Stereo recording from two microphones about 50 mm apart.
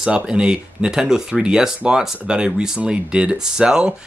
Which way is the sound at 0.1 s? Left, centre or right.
Centre.